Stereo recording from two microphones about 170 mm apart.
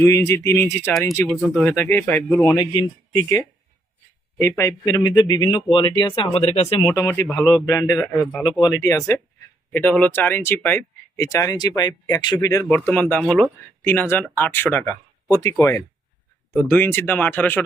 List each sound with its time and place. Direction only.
0.0 s speech: 15° left (ahead or behind)
2.6 s speech: 25° left (ahead or behind)
6.4 s speech: 35° left (ahead or behind)
7.6 s speech: 20° left (ahead or behind)
8.4 s speech: 25° left (ahead or behind)